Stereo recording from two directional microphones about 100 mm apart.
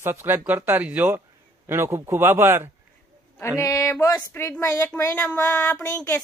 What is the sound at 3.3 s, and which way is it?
A woman's voice, 30° left (ahead or behind).